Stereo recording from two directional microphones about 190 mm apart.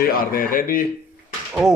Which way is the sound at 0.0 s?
50° left (ahead or behind).